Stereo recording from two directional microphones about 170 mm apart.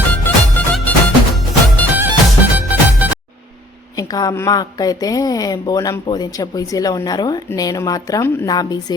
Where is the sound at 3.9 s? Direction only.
20° left (ahead or behind).